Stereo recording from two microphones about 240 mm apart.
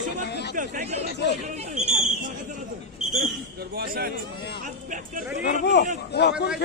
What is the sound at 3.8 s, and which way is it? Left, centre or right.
Speech, right.